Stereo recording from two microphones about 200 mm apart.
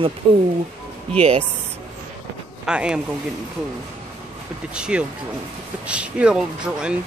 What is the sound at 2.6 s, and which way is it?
Speech, 5° right (ahead or behind).